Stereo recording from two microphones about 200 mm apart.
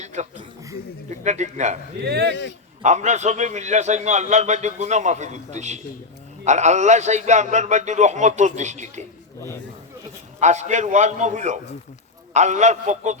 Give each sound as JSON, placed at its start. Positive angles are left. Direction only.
{"t": 0.0, "sound": "a man's voice", "side_deg": -35}
{"t": 2.0, "sound": "speech", "side_deg": -55}
{"t": 2.8, "sound": "a man's voice", "side_deg": -35}
{"t": 10.4, "sound": "a man's voice", "side_deg": -35}